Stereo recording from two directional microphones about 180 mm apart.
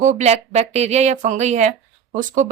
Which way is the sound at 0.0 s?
40° right (ahead or behind).